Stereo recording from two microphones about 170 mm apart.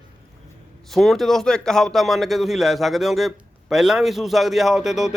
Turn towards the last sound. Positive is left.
turn(degrees=0)  # may be behind; listen again after turning